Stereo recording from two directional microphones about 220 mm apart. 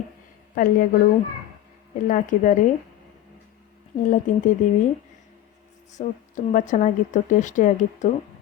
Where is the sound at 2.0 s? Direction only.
35° left (ahead or behind).